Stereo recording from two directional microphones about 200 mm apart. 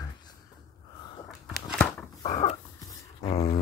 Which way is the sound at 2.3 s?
30° left (ahead or behind).